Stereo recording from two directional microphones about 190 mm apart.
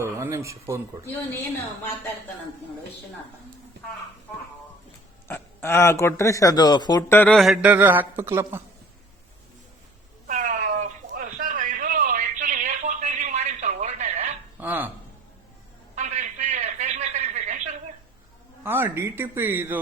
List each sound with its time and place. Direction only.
0.0 s speech: 15° right (ahead or behind)
5.3 s speech: 15° left (ahead or behind)
7.2 s speech: 5° left (ahead or behind); by 8.6 s 15° right (ahead or behind)
10.2 s a sound: 40° right (ahead or behind)
14.6 s dishes: 10° right (ahead or behind)
16.0 s a sound: 40° right (ahead or behind)
18.6 s speech: 10° right (ahead or behind)